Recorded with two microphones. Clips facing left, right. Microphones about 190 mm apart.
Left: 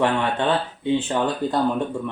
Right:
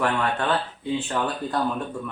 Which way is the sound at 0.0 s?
25° left (ahead or behind).